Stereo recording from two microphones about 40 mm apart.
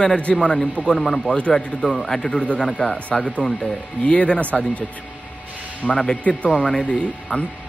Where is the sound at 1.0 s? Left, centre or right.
Centre.